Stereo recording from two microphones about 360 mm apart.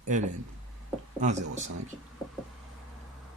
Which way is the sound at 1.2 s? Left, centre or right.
Centre.